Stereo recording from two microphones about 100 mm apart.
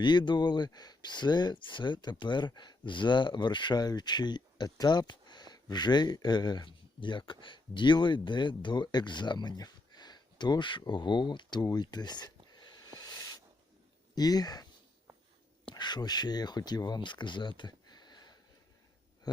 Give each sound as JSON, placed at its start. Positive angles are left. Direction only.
{"t": 0.0, "sound": "speech", "side_deg": 50}
{"t": 15.7, "sound": "speech", "side_deg": 45}